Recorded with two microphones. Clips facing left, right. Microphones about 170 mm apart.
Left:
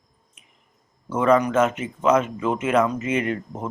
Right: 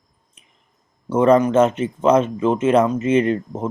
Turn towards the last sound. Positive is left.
turn(degrees=-25)  # may be behind; listen again after turning